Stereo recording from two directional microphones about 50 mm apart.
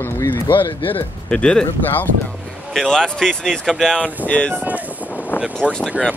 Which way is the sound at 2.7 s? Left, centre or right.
Centre.